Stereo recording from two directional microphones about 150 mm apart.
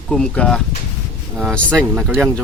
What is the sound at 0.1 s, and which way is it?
Speech, 5° left (ahead or behind).